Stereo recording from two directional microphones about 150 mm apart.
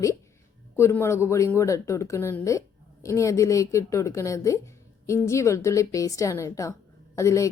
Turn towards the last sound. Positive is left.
turn(degrees=20)  # may be behind; listen again after turning